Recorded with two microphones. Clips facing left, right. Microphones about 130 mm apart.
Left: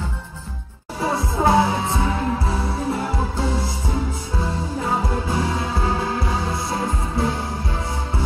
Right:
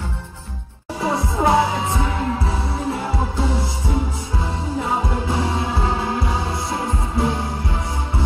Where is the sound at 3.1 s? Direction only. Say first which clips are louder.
Right 1 dB; 25° right (ahead or behind).